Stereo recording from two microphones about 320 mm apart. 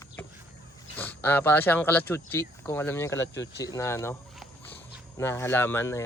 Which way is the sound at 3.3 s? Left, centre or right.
Left.